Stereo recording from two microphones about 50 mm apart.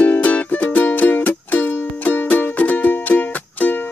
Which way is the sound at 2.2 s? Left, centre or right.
Left.